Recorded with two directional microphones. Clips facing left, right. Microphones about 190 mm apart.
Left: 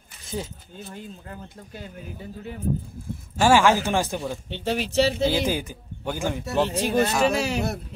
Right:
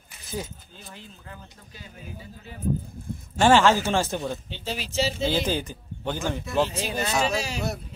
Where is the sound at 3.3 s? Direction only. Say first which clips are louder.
Even; 10° left (ahead or behind).